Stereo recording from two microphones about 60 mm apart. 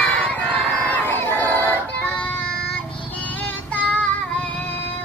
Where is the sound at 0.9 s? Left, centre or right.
Left.